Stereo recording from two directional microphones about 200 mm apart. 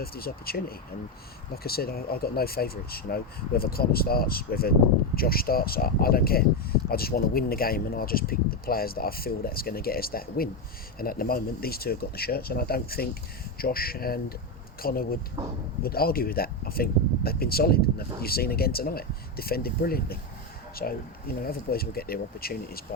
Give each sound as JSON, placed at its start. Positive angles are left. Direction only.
{"t": 0.0, "sound": "speech", "side_deg": 50}
{"t": 1.6, "sound": "speech", "side_deg": 50}